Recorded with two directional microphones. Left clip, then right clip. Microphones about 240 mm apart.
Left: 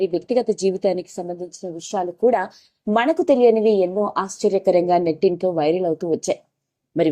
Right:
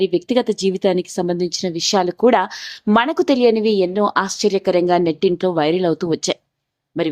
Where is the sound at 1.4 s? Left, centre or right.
Right.